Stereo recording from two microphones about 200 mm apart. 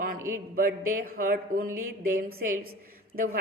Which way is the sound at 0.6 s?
45° right (ahead or behind).